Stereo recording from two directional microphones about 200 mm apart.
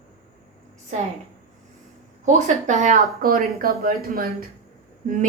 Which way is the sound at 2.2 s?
35° right (ahead or behind).